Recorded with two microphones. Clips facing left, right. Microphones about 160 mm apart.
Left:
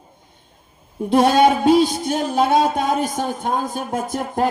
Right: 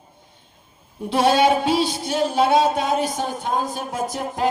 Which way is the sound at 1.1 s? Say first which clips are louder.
Left 3 dB; 50° left (ahead or behind).